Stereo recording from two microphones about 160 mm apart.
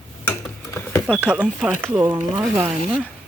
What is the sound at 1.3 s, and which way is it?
Speech, 5° right (ahead or behind).